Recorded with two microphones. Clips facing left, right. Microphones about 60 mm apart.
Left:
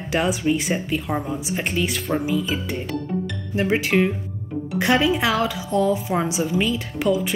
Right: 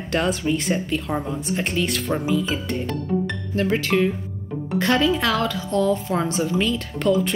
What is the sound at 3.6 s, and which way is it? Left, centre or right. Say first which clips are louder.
Speech: left 1 dB; centre.